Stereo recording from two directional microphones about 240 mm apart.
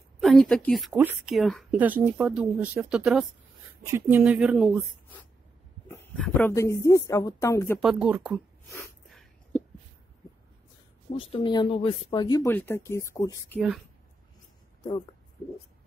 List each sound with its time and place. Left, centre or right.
0.2 s a woman's voice: centre
7.8 s a woman's voice: centre
8.7 s a sound: centre
11.1 s a woman's voice: centre